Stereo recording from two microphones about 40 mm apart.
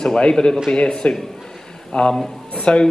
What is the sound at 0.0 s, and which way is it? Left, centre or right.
A woman's voice, centre.